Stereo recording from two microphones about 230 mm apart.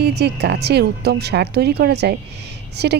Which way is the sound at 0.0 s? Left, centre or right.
Right.